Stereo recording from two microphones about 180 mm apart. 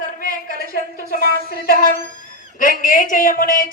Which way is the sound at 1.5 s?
55° left (ahead or behind).